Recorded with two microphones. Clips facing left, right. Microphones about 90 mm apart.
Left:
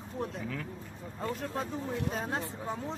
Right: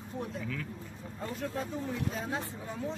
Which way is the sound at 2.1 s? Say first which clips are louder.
Left 1 dB; 40° left (ahead or behind).